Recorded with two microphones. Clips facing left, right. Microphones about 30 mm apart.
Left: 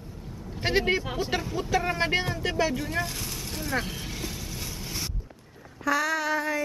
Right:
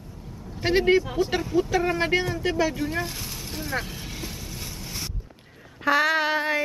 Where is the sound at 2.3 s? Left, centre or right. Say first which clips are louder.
Right 2 dB; centre.